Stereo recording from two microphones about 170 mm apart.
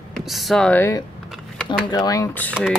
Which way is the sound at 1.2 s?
Centre (ahead or behind).